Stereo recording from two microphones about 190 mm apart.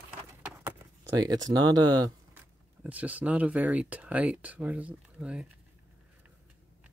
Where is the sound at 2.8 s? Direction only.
5° right (ahead or behind).